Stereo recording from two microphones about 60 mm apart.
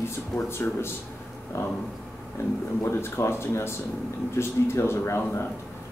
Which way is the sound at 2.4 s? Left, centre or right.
Left.